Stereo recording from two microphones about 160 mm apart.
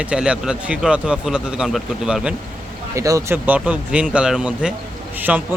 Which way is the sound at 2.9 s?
20° right (ahead or behind).